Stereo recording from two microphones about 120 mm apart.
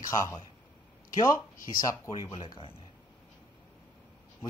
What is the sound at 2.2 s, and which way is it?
Speech, 45° left (ahead or behind).